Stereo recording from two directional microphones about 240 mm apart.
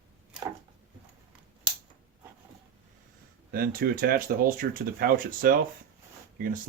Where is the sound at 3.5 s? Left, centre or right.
Right.